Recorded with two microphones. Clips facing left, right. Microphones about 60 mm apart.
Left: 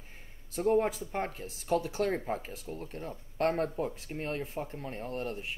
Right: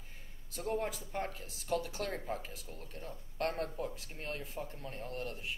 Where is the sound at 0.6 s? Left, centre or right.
Left.